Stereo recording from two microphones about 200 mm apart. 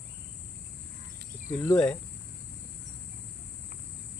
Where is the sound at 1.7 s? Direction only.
5° left (ahead or behind).